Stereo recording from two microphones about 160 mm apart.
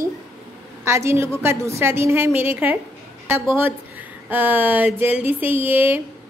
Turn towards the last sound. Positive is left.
turn(degrees=-10)  # may be behind; listen again after turning